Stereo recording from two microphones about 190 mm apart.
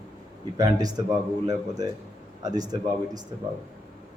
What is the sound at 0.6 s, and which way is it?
A man's voice, 20° right (ahead or behind).